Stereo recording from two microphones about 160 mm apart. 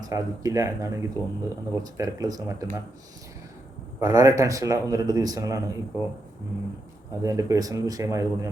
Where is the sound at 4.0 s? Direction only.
20° right (ahead or behind).